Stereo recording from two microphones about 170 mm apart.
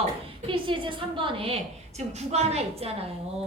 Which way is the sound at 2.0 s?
40° right (ahead or behind).